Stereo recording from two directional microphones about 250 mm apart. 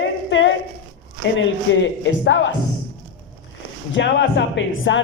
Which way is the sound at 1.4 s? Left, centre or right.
Left.